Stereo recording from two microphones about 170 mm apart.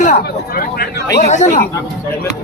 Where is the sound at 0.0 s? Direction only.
55° left (ahead or behind).